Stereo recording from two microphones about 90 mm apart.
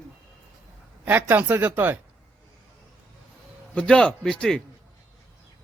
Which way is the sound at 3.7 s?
10° left (ahead or behind).